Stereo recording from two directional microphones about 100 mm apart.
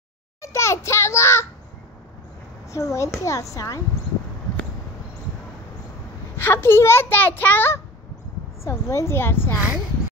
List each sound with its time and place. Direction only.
0.4 s a sound: 30° left (ahead or behind)
2.7 s speech: 30° left (ahead or behind)
6.3 s a child's voice: 25° left (ahead or behind)